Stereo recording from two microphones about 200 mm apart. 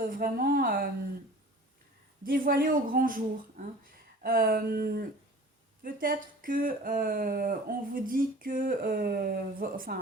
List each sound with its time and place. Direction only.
0.0 s speech: 45° right (ahead or behind)
2.2 s speech: 45° right (ahead or behind)